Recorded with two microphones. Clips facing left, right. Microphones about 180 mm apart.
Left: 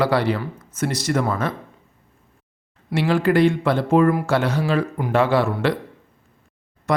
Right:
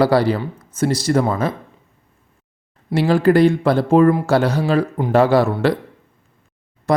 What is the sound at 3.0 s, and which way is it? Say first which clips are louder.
Speech: right 4 dB; 35° right (ahead or behind).